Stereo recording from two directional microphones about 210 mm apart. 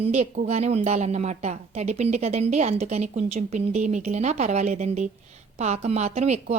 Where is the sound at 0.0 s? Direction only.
35° right (ahead or behind).